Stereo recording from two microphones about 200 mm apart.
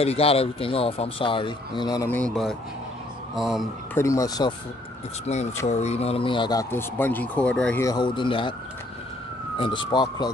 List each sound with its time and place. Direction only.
0.0 s speech: 30° left (ahead or behind)
2.0 s a man's voice: 5° left (ahead or behind)
3.9 s speech: 15° left (ahead or behind)
5.2 s speech: 35° left (ahead or behind); by 7.8 s 5° left (ahead or behind)
7.8 s speech: 20° left (ahead or behind)
9.6 s speech: 25° left (ahead or behind)